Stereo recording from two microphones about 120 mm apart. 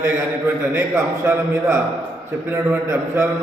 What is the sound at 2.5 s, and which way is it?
Speech, 25° right (ahead or behind).